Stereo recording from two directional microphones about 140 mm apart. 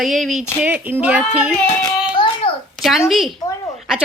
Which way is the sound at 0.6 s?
15° right (ahead or behind).